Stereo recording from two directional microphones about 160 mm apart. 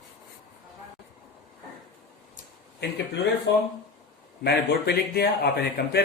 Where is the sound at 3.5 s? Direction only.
90° left.